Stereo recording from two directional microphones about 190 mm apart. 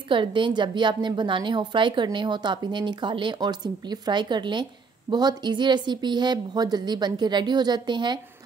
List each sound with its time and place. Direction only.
0.1 s a woman's voice: 25° right (ahead or behind)